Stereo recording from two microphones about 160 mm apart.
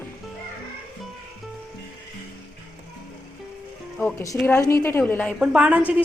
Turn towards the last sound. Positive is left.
turn(degrees=-5)  # may be behind; listen again after turning